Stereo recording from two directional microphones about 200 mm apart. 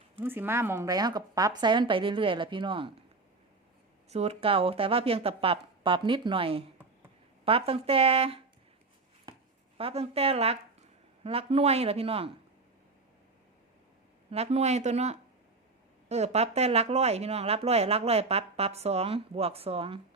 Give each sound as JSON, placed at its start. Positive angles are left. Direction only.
{"t": 0.2, "sound": "a woman's voice", "side_deg": -10}
{"t": 4.1, "sound": "a woman's voice", "side_deg": -30}
{"t": 9.7, "sound": "a woman's voice", "side_deg": -30}
{"t": 14.3, "sound": "speech", "side_deg": -30}